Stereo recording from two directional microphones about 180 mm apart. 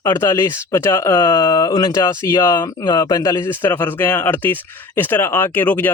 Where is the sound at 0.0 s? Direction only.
15° left (ahead or behind).